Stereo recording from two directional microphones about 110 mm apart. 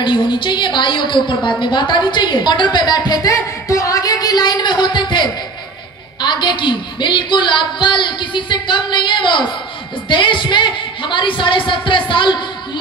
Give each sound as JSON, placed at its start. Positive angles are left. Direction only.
{"t": 0.0, "sound": "a woman's voice", "side_deg": 45}